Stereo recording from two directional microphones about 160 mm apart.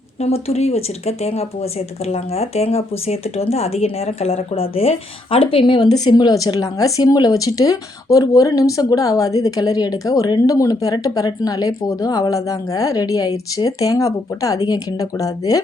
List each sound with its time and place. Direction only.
0.2 s speech: 40° left (ahead or behind); by 15.6 s 20° left (ahead or behind)